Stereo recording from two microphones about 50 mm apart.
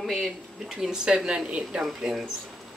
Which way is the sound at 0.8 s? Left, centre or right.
Centre.